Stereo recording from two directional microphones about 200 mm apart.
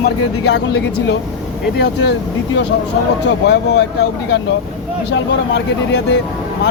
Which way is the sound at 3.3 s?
55° left (ahead or behind).